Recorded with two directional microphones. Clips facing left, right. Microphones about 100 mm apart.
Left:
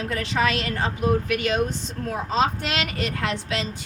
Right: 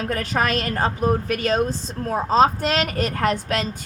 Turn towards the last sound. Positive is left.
turn(degrees=-45)  # may be behind; listen again after turning